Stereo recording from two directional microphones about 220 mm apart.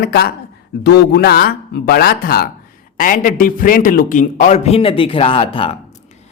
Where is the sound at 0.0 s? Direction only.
45° left (ahead or behind).